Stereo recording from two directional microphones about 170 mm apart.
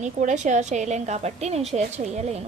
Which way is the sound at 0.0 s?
45° right (ahead or behind).